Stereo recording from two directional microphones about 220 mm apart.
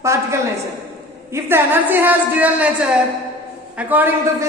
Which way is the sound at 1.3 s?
10° right (ahead or behind).